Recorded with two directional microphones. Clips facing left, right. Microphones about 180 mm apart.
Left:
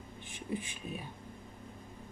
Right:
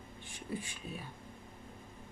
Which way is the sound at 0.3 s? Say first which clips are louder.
Left 3 dB; 20° left (ahead or behind).